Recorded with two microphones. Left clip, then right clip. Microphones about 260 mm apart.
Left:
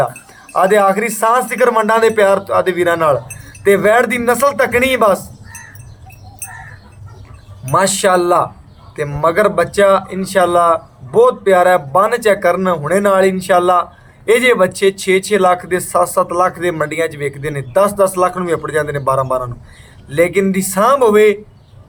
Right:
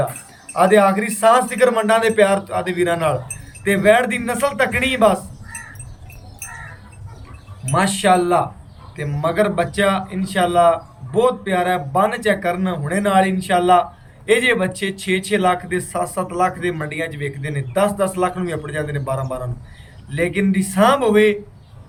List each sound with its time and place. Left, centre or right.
0.5 s speech: centre
7.7 s speech: centre